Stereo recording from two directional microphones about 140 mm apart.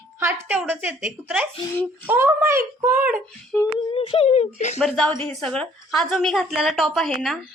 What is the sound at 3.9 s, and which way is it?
Speech, 40° left (ahead or behind).